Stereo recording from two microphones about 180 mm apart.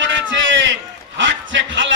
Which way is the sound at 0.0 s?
90° right.